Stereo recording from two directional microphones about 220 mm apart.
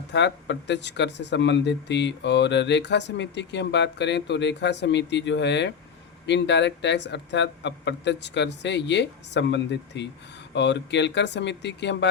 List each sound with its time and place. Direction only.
0.1 s speech: 55° left (ahead or behind)